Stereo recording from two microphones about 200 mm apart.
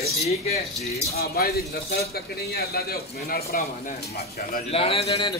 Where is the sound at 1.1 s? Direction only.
50° left (ahead or behind).